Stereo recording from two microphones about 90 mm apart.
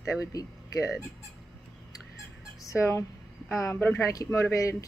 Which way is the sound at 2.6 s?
35° left (ahead or behind).